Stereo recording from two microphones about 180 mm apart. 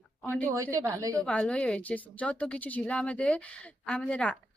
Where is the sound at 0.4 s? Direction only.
15° right (ahead or behind).